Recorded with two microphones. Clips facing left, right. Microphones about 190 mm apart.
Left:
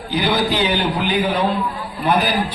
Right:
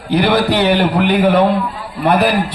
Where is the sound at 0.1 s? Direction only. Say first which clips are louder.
Right 6 dB; 65° right (ahead or behind).